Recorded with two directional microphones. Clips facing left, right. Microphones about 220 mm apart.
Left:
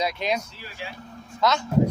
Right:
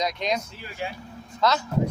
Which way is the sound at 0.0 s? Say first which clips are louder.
Left 1 dB; 5° left (ahead or behind).